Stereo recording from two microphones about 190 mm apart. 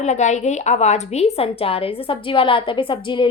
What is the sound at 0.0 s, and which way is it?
A woman's voice, 35° left (ahead or behind).